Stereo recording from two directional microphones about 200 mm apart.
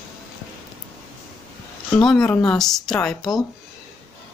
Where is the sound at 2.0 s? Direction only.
5° left (ahead or behind).